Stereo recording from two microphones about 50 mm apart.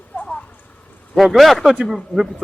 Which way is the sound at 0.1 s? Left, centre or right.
Left.